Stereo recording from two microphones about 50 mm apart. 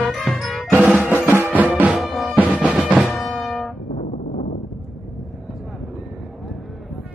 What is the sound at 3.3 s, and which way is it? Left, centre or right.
Music, centre.